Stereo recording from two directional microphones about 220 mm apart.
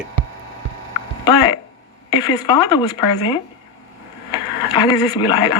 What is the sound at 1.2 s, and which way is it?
Speech, 20° left (ahead or behind).